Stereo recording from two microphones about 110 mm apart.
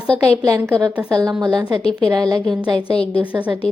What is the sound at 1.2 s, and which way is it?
Speech, 35° right (ahead or behind).